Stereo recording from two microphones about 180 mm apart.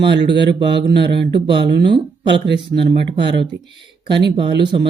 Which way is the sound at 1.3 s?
25° right (ahead or behind).